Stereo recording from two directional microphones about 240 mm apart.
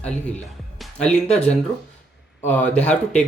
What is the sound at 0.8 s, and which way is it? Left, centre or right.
Music, centre.